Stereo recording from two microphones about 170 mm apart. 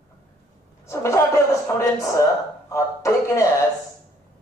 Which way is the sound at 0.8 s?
15° left (ahead or behind).